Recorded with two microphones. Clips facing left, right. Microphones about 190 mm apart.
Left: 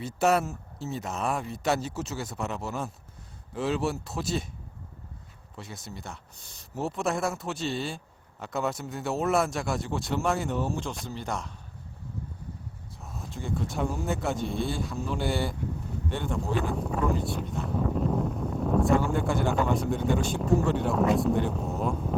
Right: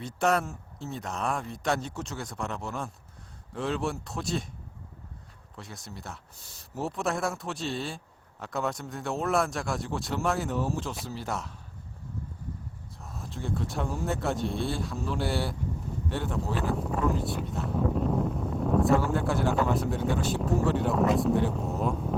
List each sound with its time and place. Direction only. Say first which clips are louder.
0.0 s a man's voice: left 2 dB; 5° left (ahead or behind)
5.5 s a man's voice: left 2 dB; centre (ahead or behind)
13.0 s a man's voice: even; centre (ahead or behind)